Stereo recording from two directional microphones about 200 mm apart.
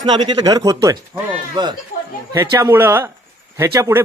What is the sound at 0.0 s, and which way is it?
A man's voice, 20° right (ahead or behind).